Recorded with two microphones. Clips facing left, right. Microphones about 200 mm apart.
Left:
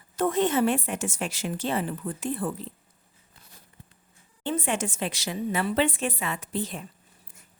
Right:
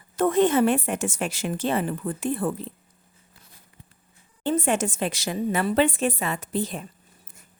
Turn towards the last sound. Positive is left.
turn(degrees=-40)  # may be behind; listen again after turning